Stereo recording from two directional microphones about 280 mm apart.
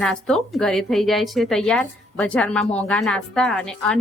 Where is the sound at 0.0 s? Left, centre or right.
Centre.